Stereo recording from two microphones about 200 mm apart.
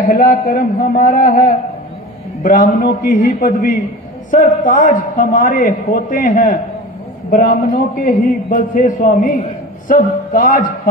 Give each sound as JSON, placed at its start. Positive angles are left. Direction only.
{"t": 0.1, "sound": "a man's voice", "side_deg": 45}